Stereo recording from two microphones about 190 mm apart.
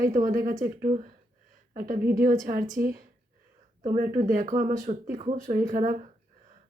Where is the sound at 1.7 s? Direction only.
45° right (ahead or behind).